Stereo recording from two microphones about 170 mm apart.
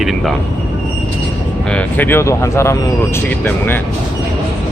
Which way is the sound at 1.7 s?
10° left (ahead or behind).